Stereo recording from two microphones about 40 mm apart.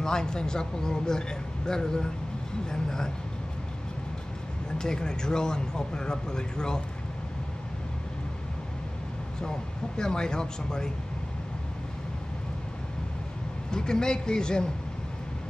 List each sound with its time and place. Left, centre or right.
0.0 s speech: centre
4.7 s speech: centre
9.4 s speech: centre
13.7 s speech: centre